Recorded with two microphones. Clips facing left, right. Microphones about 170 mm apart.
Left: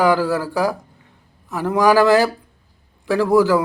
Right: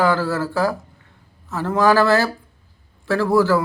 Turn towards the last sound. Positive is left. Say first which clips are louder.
# left 2 dB
turn(degrees=15)  # may be behind; listen again after turning